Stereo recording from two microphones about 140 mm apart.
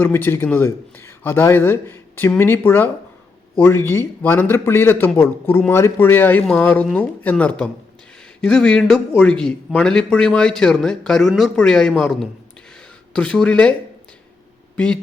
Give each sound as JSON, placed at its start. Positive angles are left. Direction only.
{"t": 0.0, "sound": "a man's voice", "side_deg": 15}